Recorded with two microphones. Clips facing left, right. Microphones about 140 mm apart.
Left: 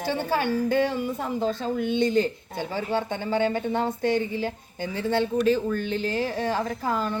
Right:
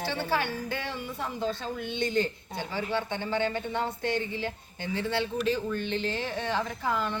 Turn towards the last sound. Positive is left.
turn(degrees=40)  # may be behind; listen again after turning